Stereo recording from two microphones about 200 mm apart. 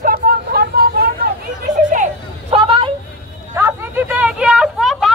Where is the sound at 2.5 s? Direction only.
25° right (ahead or behind).